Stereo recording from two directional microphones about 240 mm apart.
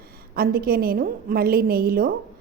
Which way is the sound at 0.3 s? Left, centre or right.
Right.